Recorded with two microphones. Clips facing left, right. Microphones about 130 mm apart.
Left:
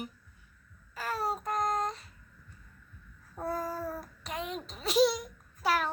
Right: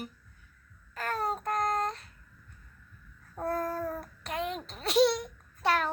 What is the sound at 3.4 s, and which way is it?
Child singing, centre (ahead or behind).